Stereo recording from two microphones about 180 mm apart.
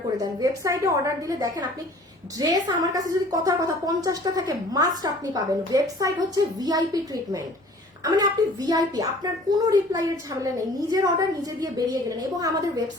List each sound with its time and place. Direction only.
0.2 s a woman's voice: 20° right (ahead or behind)
2.6 s a woman's voice: 20° right (ahead or behind)